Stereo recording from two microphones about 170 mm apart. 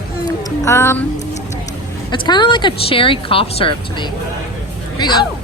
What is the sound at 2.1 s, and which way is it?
Speech, 25° left (ahead or behind).